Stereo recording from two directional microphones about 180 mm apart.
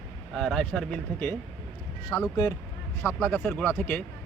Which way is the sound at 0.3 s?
Centre (ahead or behind).